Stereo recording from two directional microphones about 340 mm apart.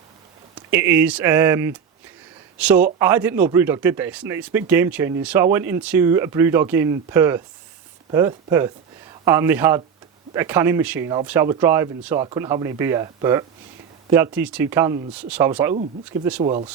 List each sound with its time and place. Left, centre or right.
0.5 s a man's voice: centre
16.4 s a man's voice: centre